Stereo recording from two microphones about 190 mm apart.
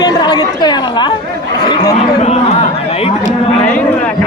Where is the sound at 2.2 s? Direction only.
35° left (ahead or behind).